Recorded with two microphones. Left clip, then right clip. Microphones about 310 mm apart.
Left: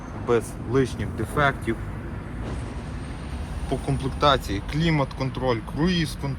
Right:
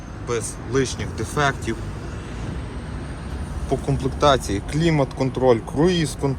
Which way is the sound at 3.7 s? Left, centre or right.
Centre.